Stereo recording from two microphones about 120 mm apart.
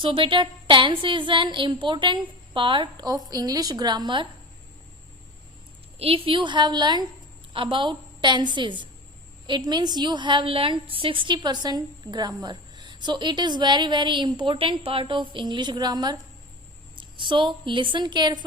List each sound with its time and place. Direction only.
0.0 s a woman's voice: 45° right (ahead or behind)
6.0 s a woman's voice: 50° right (ahead or behind)